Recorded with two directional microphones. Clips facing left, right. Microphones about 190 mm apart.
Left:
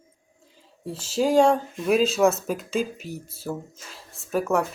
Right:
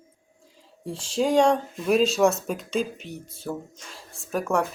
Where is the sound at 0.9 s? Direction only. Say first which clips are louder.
Left 1 dB; 5° left (ahead or behind).